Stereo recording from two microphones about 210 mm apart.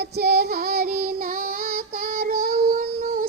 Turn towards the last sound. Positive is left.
turn(degrees=-45)  # may be behind; listen again after turning